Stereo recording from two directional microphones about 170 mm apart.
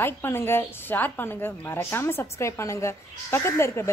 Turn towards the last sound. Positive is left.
turn(degrees=15)  # may be behind; listen again after turning